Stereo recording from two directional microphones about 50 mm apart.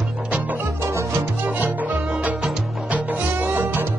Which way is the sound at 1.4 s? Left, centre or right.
Right.